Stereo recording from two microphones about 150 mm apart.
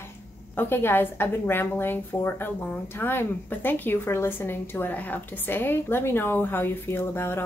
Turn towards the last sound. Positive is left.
turn(degrees=15)  # may be behind; listen again after turning